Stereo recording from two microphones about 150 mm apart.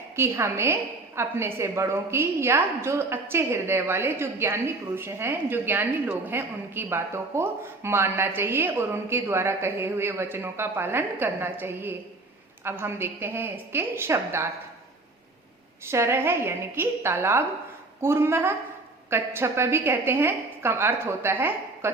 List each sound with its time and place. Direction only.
0.2 s a woman's voice: 20° right (ahead or behind)
15.9 s a woman's voice: 15° right (ahead or behind)